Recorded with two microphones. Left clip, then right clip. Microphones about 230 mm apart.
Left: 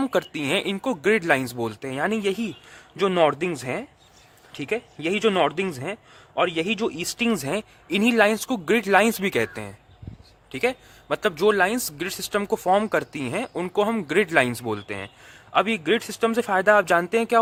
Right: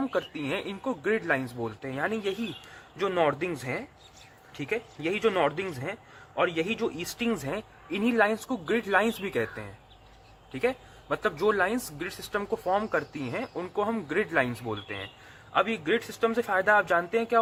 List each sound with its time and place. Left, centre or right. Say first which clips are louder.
0.0 s speech: left 6 dB; left